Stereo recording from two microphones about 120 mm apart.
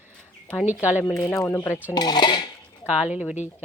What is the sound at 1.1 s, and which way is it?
Speech, 25° left (ahead or behind).